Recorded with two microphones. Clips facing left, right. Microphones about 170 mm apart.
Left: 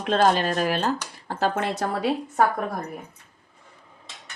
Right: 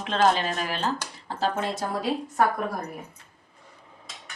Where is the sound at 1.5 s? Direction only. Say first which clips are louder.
Left 2 dB; 65° left (ahead or behind).